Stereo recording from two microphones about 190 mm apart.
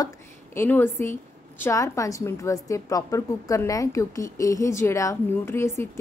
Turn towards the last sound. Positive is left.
turn(degrees=15)  # may be behind; listen again after turning